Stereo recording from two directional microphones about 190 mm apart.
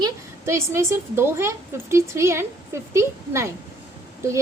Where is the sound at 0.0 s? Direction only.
15° right (ahead or behind).